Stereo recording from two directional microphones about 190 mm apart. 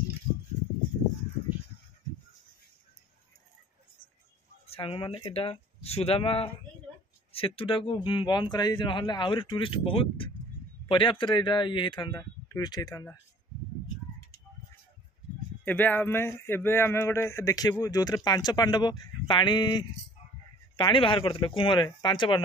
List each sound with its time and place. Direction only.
4.6 s speech: 30° left (ahead or behind)
15.6 s speech: 10° left (ahead or behind); by 22.4 s 25° left (ahead or behind)